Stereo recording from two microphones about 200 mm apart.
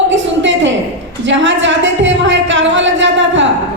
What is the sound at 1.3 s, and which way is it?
A woman's voice, 65° right (ahead or behind).